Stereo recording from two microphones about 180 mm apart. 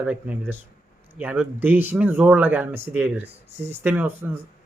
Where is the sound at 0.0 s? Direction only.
10° right (ahead or behind).